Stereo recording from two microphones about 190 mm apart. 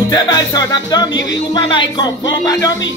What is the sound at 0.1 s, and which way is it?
Music, 20° left (ahead or behind).